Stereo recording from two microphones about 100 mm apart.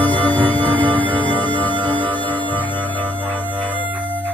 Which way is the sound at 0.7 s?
60° right (ahead or behind).